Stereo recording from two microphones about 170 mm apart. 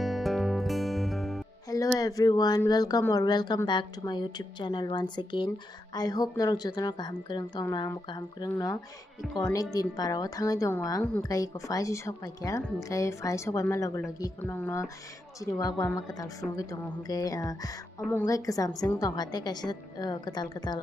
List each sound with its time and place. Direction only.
0.0 s music: centre (ahead or behind)
2.0 s speech: 20° left (ahead or behind)